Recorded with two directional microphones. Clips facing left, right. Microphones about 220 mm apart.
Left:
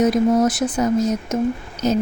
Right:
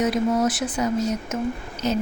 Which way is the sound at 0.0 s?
45° left (ahead or behind).